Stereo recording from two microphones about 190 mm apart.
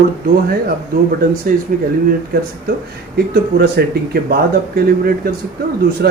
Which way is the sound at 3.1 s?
55° right (ahead or behind).